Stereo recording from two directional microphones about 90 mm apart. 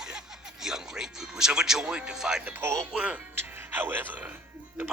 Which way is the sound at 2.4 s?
25° right (ahead or behind).